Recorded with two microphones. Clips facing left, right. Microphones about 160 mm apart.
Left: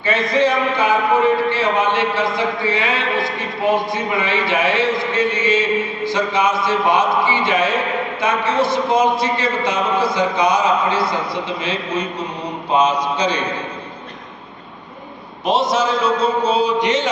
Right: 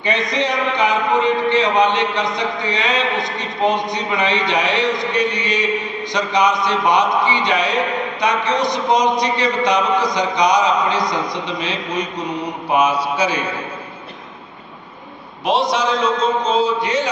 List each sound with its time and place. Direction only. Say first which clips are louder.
0.0 s a man's voice: left 3 dB; 20° right (ahead or behind)
15.4 s a man's voice: even; centre (ahead or behind); by 17.1 s 20° left (ahead or behind)